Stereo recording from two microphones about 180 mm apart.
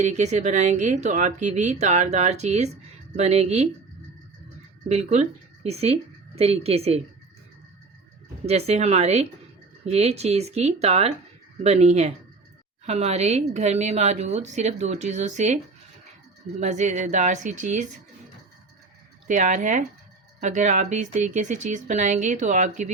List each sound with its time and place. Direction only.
0.0 s a woman's voice: 40° right (ahead or behind)
4.9 s speech: 40° right (ahead or behind)
8.4 s a woman's voice: 35° right (ahead or behind)
16.6 s a woman's voice: 40° right (ahead or behind)
19.3 s speech: 45° right (ahead or behind)